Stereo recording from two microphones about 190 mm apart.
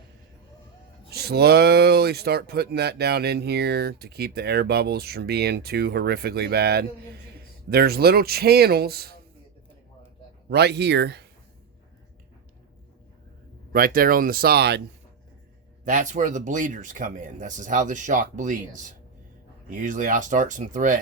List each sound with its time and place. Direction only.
1.1 s speech: 55° right (ahead or behind)
10.5 s speech: 60° right (ahead or behind)
13.7 s speech: 50° right (ahead or behind)
15.8 s speech: 40° right (ahead or behind)